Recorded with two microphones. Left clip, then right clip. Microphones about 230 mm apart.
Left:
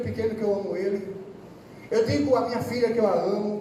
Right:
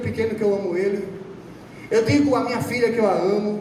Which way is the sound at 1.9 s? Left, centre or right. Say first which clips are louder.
Right 4 dB; right.